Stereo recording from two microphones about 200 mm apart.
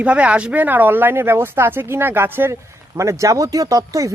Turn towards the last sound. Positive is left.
turn(degrees=-15)  # may be behind; listen again after turning